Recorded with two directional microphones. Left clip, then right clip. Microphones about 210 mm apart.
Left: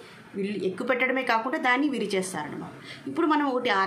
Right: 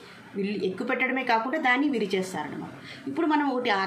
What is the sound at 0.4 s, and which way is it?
A woman's voice, 15° left (ahead or behind).